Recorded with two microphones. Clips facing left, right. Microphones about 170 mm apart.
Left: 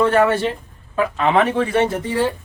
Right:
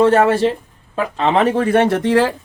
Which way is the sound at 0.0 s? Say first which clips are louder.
Right 3 dB; 25° right (ahead or behind).